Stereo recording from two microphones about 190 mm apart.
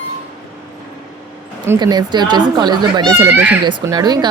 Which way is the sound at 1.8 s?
20° right (ahead or behind).